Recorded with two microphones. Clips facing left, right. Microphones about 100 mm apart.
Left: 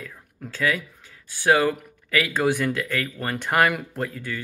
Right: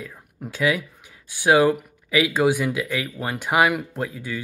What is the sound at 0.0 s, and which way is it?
Speech, 15° right (ahead or behind).